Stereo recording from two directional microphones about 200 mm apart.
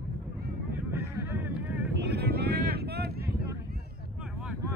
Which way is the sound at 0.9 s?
10° right (ahead or behind).